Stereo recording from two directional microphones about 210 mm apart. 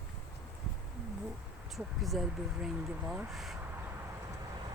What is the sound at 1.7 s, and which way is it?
Speech, centre (ahead or behind).